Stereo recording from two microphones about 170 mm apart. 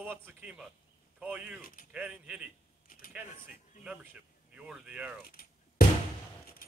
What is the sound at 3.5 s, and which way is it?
Speech, 5° right (ahead or behind).